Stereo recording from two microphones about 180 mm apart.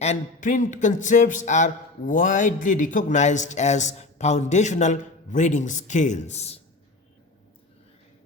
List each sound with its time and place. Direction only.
0.0 s speech: 40° left (ahead or behind)